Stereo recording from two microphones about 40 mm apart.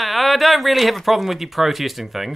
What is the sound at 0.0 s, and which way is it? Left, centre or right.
Speech, centre.